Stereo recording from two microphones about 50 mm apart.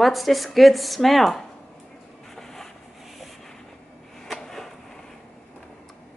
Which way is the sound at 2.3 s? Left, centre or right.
Centre.